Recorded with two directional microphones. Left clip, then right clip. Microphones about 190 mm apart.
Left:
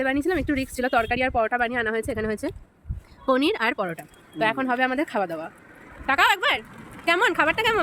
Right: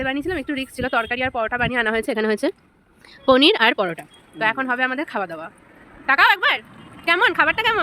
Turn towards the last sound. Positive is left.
turn(degrees=0)  # may be behind; listen again after turning